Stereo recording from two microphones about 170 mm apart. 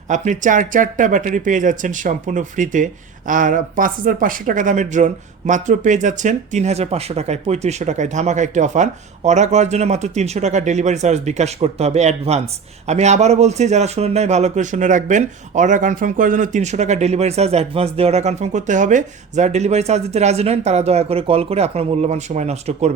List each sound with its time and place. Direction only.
0.1 s a man's voice: 45° right (ahead or behind)